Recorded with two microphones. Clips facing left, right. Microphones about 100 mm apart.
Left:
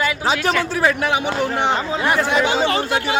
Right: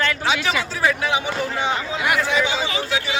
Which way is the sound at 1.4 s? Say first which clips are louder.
Left 4 dB; 60° left (ahead or behind).